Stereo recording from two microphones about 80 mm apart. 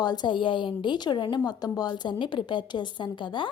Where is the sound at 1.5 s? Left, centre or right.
Left.